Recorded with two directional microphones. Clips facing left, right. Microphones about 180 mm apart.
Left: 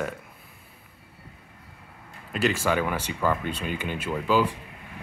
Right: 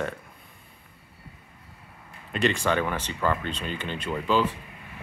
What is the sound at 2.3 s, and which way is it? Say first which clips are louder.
Speech: even; 5° left (ahead or behind).